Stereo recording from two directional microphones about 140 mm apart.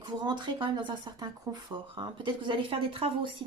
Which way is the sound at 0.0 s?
35° right (ahead or behind).